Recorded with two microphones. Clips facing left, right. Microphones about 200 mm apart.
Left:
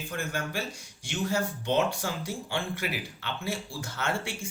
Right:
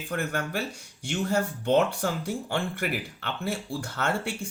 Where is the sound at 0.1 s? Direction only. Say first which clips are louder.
Right 4 dB; 60° right (ahead or behind).